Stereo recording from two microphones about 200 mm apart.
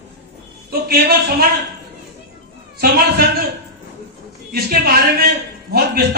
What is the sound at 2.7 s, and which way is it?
Speech, 50° right (ahead or behind).